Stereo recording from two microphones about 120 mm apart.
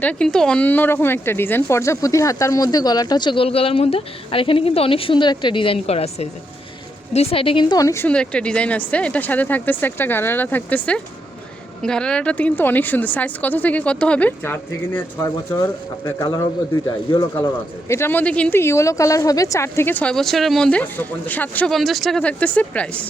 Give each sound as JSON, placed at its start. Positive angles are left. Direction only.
{"t": 0.0, "sound": "a woman's voice", "side_deg": 10}
{"t": 8.0, "sound": "a woman's voice", "side_deg": 10}
{"t": 15.5, "sound": "a woman's voice", "side_deg": 30}
{"t": 18.6, "sound": "a woman's voice", "side_deg": 25}
{"t": 20.1, "sound": "a woman's voice", "side_deg": 0}
{"t": 21.7, "sound": "a woman's voice", "side_deg": 0}